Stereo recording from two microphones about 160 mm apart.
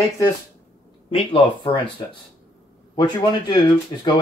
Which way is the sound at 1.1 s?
35° left (ahead or behind).